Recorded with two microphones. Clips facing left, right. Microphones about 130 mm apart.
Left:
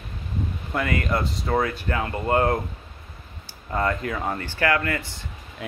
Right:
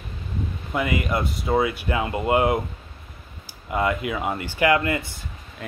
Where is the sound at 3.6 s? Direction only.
10° right (ahead or behind).